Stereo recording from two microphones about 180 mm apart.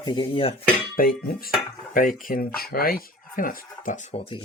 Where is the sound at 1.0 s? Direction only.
55° left (ahead or behind).